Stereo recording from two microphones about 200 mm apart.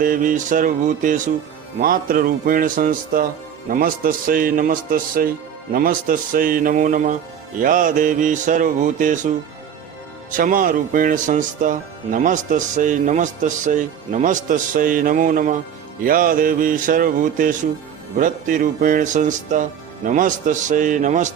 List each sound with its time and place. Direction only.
0.0 s a man's voice: 45° right (ahead or behind)
10.3 s a man's voice: 40° right (ahead or behind)